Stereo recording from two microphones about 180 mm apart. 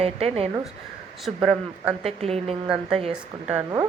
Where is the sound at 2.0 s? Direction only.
35° right (ahead or behind).